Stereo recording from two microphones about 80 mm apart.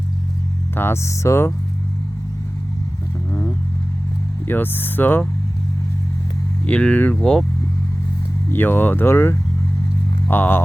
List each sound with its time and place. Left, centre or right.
0.8 s speech: left
4.4 s speech: left
6.7 s speech: centre
8.4 s speech: left